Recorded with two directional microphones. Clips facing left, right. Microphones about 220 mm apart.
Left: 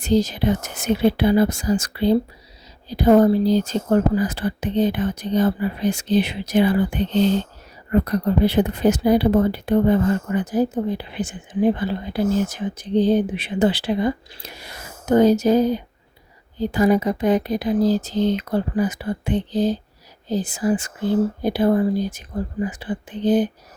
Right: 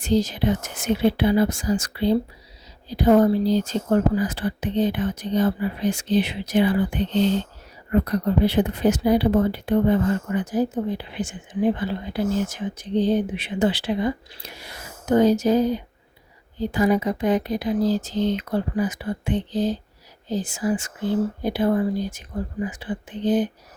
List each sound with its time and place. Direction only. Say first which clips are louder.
0.0 s speech: left 2 dB; 40° left (ahead or behind)